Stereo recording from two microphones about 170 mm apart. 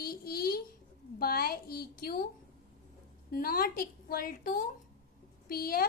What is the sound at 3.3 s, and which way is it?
A woman's voice, 60° left (ahead or behind).